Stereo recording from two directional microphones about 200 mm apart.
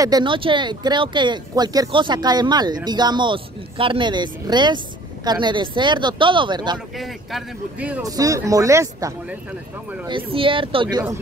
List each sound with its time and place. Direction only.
0.0 s speech: 20° right (ahead or behind)
7.0 s speech: centre (ahead or behind)
10.3 s speech: 25° right (ahead or behind)